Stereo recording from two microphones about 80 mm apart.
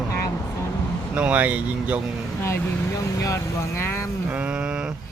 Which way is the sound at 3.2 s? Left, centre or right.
Left.